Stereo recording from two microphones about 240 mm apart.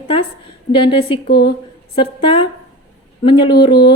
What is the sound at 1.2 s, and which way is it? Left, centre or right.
Speech, left.